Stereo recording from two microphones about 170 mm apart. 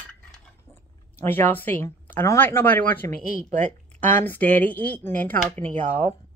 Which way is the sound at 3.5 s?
45° right (ahead or behind).